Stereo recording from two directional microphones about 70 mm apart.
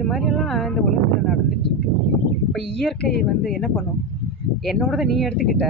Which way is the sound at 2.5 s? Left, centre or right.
Centre.